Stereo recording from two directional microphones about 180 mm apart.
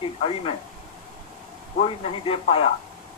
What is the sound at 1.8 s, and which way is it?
Speech, 30° left (ahead or behind).